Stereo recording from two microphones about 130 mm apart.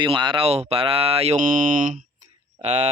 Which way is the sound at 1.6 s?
90° right.